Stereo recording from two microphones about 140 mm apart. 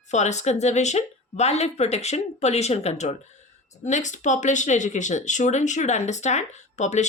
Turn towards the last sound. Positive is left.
turn(degrees=55)  # may be behind; listen again after turning